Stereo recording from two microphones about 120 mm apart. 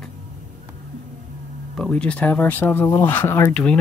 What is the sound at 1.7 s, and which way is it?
Speech, 5° left (ahead or behind).